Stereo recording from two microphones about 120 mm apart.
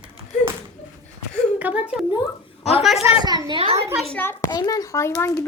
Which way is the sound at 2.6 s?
60° left (ahead or behind).